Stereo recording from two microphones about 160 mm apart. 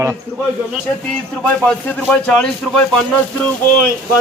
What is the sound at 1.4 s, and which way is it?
A man's voice, 10° left (ahead or behind).